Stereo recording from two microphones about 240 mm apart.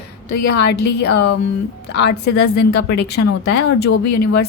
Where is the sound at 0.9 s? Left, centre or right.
Left.